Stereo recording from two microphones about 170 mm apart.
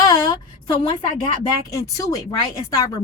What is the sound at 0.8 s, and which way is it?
Speech, 25° left (ahead or behind).